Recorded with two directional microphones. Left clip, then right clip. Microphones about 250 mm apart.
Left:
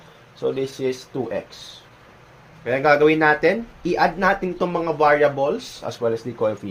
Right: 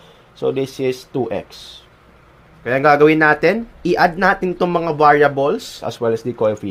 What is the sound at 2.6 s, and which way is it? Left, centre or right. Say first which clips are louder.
Speech: right 4 dB; right.